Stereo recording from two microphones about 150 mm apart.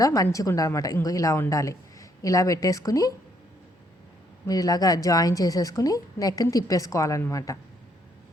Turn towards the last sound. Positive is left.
turn(degrees=20)  # may be behind; listen again after turning